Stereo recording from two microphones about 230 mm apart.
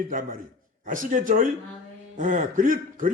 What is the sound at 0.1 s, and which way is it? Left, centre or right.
A man's voice, right.